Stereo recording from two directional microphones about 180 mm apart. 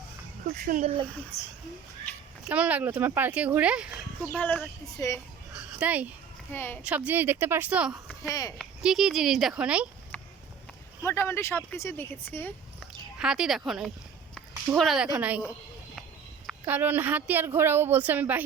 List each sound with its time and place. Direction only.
0.4 s a child's voice: 55° right (ahead or behind)
2.5 s a woman's voice: 10° right (ahead or behind)
4.3 s speech: 10° left (ahead or behind)
5.5 s speech: 5° right (ahead or behind)
6.5 s speech: 10° left (ahead or behind)
6.8 s a woman's voice: 10° right (ahead or behind)
8.3 s speech: 20° left (ahead or behind)
8.5 s speech: centre (ahead or behind)
10.1 s a sound: 5° left (ahead or behind)
11.0 s speech: 15° left (ahead or behind)
13.1 s a woman's voice: 5° right (ahead or behind)
16.5 s a woman's voice: 10° right (ahead or behind)